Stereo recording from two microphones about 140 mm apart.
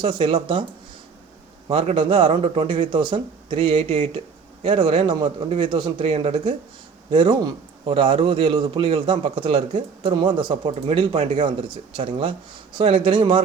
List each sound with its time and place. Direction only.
0.0 s a man's voice: 40° right (ahead or behind)
1.6 s a man's voice: 40° right (ahead or behind)